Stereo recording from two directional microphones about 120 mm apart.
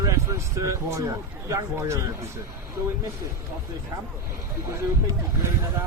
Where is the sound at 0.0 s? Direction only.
25° right (ahead or behind).